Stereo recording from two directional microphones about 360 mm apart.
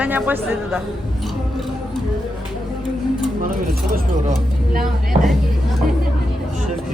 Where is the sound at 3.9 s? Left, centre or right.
Right.